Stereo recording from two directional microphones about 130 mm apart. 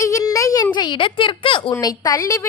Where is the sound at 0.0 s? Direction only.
25° left (ahead or behind); by 1.7 s 40° left (ahead or behind).